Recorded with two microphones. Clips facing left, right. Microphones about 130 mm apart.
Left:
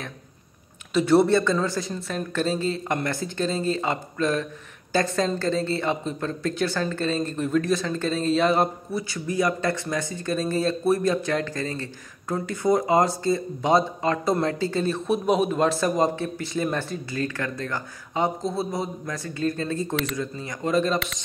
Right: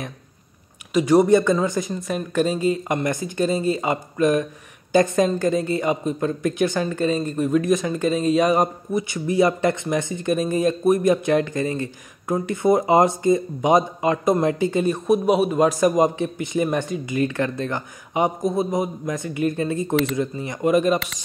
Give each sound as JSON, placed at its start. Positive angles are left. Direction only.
{"t": 0.9, "sound": "speech", "side_deg": -10}